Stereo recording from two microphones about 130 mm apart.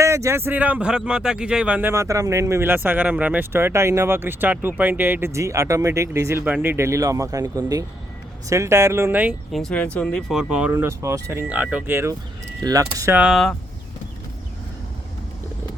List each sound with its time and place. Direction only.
0.0 s speech: 20° right (ahead or behind)
6.4 s speech: 15° right (ahead or behind)
9.5 s speech: 5° left (ahead or behind)
10.5 s speech: 10° right (ahead or behind)
13.1 s speech: 5° right (ahead or behind)